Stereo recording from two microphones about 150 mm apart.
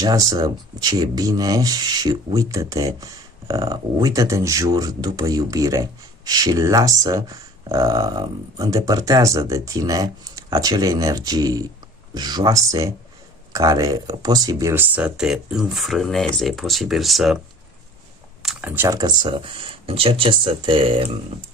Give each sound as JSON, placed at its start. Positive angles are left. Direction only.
{"t": 0.0, "sound": "speech", "side_deg": -25}
{"t": 18.4, "sound": "speech", "side_deg": -10}